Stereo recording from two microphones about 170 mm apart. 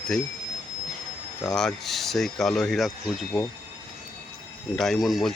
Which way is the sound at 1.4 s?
5° left (ahead or behind).